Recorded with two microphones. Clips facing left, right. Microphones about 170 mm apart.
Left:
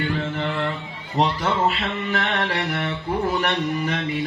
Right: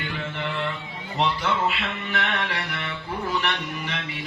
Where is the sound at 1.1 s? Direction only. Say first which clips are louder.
Left 3 dB; 40° left (ahead or behind).